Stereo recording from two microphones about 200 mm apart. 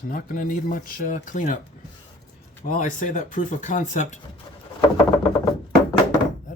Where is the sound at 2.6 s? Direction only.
40° left (ahead or behind).